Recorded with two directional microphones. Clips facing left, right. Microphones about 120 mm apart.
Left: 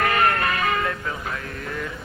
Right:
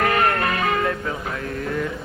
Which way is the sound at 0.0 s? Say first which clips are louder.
Right 1 dB; 25° right (ahead or behind).